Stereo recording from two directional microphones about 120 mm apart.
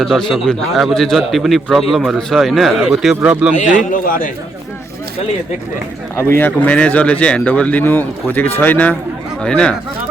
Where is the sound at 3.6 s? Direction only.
90° left.